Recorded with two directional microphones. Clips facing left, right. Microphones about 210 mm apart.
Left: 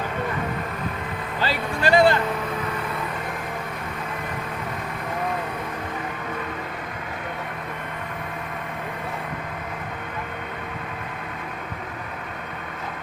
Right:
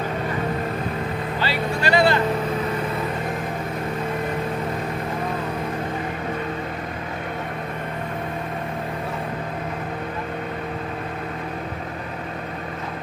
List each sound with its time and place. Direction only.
1.5 s speech: 45° left (ahead or behind)